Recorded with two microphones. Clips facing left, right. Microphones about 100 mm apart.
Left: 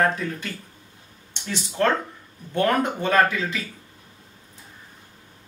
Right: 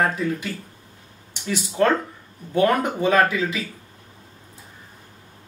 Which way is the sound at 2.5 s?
10° right (ahead or behind).